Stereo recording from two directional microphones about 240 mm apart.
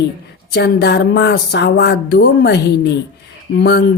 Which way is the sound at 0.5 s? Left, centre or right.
Left.